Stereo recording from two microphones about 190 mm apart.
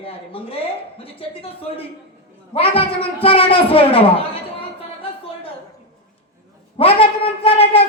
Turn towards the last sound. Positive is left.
turn(degrees=30)  # may be behind; listen again after turning